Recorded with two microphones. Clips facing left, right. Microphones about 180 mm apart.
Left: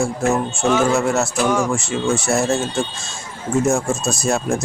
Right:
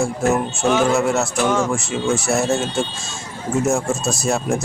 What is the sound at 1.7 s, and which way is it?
Speech, centre (ahead or behind).